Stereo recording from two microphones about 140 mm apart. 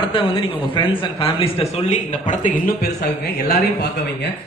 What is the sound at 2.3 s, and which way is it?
Speech, 75° left (ahead or behind).